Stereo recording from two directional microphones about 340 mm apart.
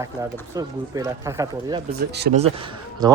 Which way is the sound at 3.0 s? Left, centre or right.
Centre.